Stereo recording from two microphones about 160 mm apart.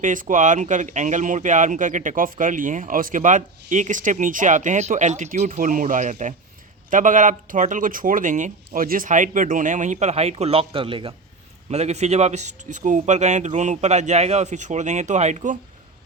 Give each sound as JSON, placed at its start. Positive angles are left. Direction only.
{"t": 0.0, "sound": "speech", "side_deg": -55}